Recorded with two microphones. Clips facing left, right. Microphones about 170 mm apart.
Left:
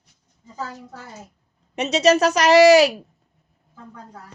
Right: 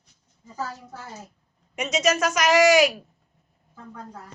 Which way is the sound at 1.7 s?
35° left (ahead or behind).